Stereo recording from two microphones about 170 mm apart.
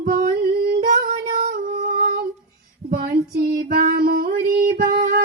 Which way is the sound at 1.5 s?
50° right (ahead or behind).